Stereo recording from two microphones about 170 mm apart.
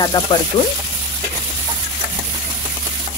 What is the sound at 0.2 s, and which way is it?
Speech, 20° left (ahead or behind).